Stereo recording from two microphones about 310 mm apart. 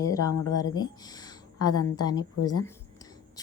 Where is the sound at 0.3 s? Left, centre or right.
Left.